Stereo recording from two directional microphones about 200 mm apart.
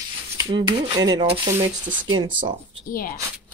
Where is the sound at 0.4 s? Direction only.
20° right (ahead or behind).